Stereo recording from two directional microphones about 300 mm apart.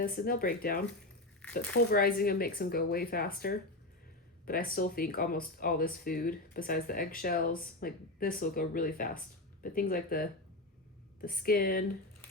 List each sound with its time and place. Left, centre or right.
0.0 s speech: left